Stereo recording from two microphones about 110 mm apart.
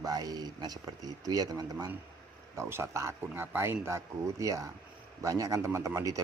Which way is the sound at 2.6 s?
25° right (ahead or behind).